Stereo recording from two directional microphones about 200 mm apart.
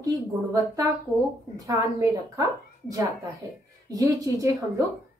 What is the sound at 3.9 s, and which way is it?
Speech, 15° right (ahead or behind).